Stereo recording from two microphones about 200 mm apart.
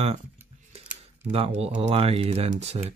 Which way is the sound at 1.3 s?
30° right (ahead or behind).